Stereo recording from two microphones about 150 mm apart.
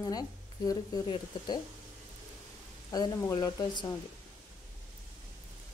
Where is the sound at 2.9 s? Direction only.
25° left (ahead or behind).